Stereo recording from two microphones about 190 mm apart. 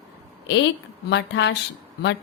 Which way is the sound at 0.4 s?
70° left (ahead or behind).